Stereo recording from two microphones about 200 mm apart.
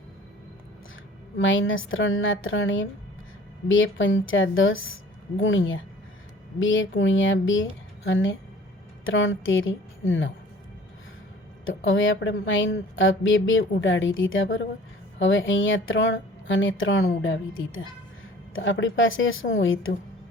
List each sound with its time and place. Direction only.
1.4 s a woman's voice: 70° left (ahead or behind)
11.9 s a woman's voice: 75° left (ahead or behind)
17.1 s a woman's voice: 75° left (ahead or behind)